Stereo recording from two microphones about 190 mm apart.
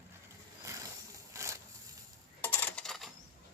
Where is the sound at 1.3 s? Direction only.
15° right (ahead or behind).